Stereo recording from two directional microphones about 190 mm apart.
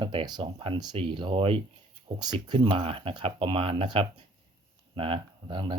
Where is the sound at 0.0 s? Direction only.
25° right (ahead or behind).